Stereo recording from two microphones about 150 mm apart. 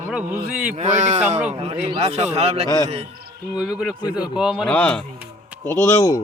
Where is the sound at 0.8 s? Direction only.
55° right (ahead or behind).